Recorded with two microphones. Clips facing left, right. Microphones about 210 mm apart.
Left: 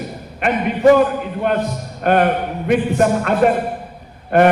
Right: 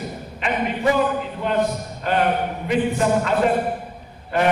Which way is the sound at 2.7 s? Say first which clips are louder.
Left 4 dB; 55° left (ahead or behind).